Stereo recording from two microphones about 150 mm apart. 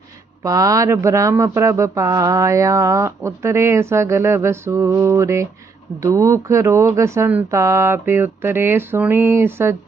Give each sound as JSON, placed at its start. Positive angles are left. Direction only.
{"t": 0.4, "sound": "speech", "side_deg": -20}